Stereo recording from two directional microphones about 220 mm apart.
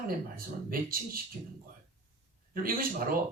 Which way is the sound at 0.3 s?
40° right (ahead or behind).